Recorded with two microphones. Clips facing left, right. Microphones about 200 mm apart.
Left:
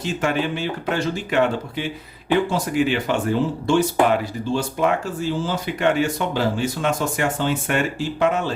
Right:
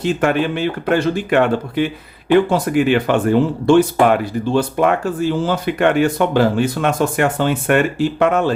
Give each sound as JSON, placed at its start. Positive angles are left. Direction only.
{"t": 0.0, "sound": "speech", "side_deg": -60}